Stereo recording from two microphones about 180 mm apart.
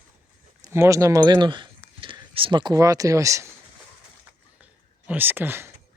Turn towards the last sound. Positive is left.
turn(degrees=-10)  # may be behind; listen again after turning